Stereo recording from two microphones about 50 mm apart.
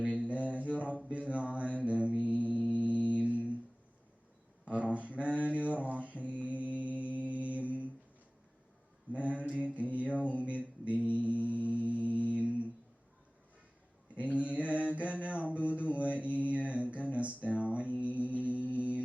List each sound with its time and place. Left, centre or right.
0.0 s mantra: right
4.6 s mantra: right
9.1 s mantra: right
14.2 s mantra: right